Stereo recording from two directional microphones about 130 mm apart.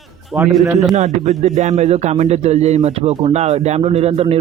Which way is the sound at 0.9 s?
60° right (ahead or behind).